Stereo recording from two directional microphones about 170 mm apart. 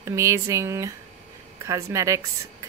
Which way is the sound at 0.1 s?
15° right (ahead or behind).